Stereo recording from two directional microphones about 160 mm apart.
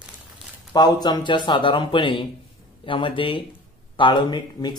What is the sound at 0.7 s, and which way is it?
Speech, 25° left (ahead or behind).